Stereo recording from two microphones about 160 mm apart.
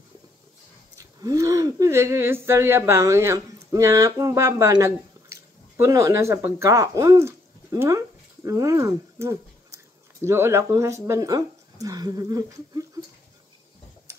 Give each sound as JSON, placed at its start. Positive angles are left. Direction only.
{"t": 0.9, "sound": "speech", "side_deg": -20}